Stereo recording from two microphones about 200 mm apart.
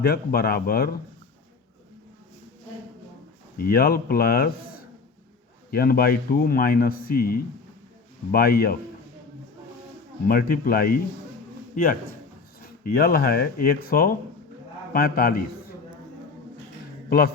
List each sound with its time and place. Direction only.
0.0 s a man's voice: 50° left (ahead or behind)
3.6 s a man's voice: 50° left (ahead or behind)
10.2 s a man's voice: 45° left (ahead or behind)
17.1 s a man's voice: 50° left (ahead or behind)